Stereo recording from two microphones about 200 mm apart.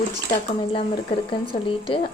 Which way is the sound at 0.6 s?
25° left (ahead or behind).